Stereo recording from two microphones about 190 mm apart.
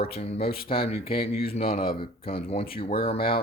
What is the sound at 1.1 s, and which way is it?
Speech, 30° left (ahead or behind).